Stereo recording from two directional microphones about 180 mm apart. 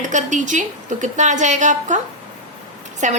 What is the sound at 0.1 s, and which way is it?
A woman's voice, 45° right (ahead or behind).